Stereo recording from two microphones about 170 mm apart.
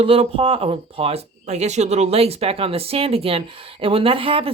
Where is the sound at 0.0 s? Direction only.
35° right (ahead or behind).